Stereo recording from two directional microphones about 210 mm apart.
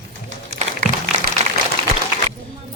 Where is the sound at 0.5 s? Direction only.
35° right (ahead or behind).